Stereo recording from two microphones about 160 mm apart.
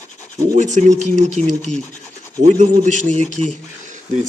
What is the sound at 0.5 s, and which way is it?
Speech, 50° right (ahead or behind).